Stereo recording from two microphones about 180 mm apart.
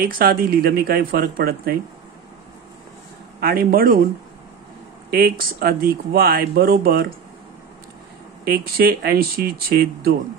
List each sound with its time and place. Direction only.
0.0 s speech: 55° right (ahead or behind)
3.3 s speech: 55° right (ahead or behind)
5.1 s speech: 55° right (ahead or behind)
8.5 s speech: 60° right (ahead or behind)